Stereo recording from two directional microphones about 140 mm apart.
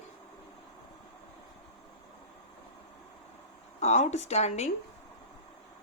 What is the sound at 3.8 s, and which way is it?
Speech, 55° left (ahead or behind).